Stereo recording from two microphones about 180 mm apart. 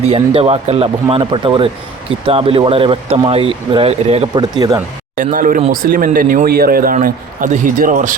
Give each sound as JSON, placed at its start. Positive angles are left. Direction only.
{"t": 0.1, "sound": "speech", "side_deg": -35}
{"t": 5.1, "sound": "a man's voice", "side_deg": -50}